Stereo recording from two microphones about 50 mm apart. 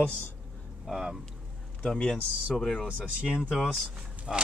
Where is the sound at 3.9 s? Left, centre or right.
Right.